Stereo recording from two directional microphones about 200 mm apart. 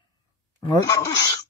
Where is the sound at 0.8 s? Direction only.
15° left (ahead or behind).